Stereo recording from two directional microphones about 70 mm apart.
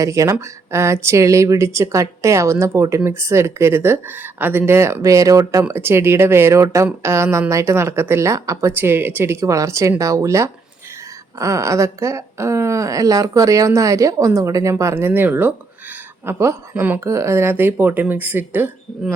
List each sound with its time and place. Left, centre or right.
0.0 s speech: right
5.7 s speech: right
8.7 s speech: right
16.2 s speech: right